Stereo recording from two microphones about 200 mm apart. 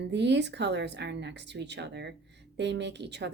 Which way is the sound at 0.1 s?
60° right (ahead or behind).